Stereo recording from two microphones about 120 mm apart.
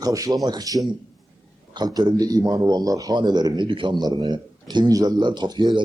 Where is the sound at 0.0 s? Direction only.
30° right (ahead or behind).